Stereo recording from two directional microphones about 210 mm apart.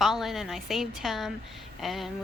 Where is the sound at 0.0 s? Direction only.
Centre (ahead or behind).